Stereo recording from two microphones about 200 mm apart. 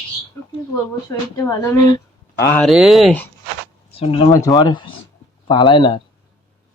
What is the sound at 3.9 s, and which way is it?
Speech, 30° left (ahead or behind).